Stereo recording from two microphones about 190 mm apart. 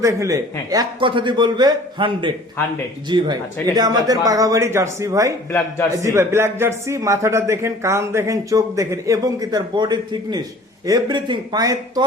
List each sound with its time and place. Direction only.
0.0 s a man's voice: 15° right (ahead or behind)
5.5 s a man's voice: 15° left (ahead or behind)
5.9 s a man's voice: 15° right (ahead or behind)